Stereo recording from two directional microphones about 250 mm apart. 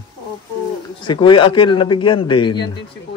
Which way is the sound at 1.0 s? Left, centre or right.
Centre.